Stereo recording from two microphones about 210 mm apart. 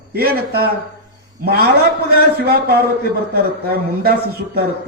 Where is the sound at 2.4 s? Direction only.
50° right (ahead or behind).